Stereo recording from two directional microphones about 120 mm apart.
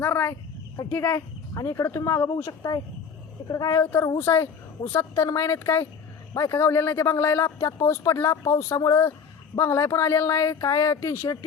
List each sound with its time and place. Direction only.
0.0 s a woman's voice: 20° left (ahead or behind)
1.5 s a woman's voice: 30° left (ahead or behind)